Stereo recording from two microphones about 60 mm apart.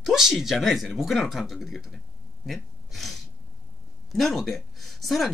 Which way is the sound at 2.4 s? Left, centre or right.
Centre.